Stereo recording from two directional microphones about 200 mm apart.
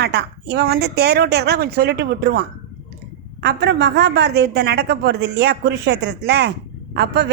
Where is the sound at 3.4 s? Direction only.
55° right (ahead or behind).